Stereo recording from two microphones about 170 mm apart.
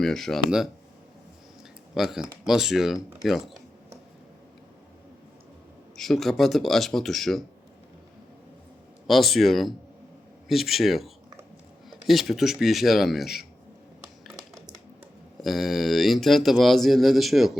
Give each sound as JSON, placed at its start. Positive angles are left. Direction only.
{"t": 0.0, "sound": "speech", "side_deg": 5}
{"t": 2.0, "sound": "speech", "side_deg": 0}
{"t": 6.0, "sound": "speech", "side_deg": 0}
{"t": 9.0, "sound": "speech", "side_deg": 0}
{"t": 15.4, "sound": "speech", "side_deg": 0}